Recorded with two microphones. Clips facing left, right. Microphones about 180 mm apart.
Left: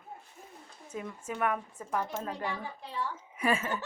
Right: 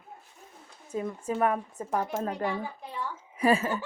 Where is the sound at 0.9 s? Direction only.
30° right (ahead or behind).